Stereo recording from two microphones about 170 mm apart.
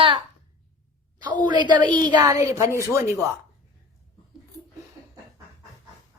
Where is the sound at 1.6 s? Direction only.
25° right (ahead or behind).